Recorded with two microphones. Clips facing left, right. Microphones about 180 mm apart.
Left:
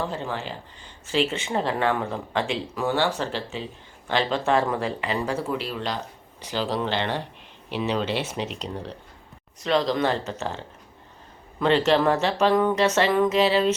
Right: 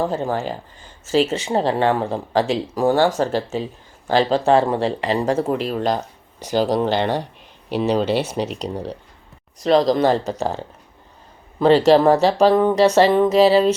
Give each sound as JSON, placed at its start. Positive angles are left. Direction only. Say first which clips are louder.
{"t": 0.0, "sound": "speech", "louder": "right 8 dB", "side_deg": -45}